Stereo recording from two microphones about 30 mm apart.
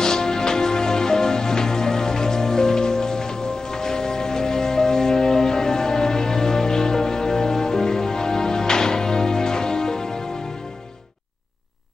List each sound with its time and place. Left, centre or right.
0.0 s music: left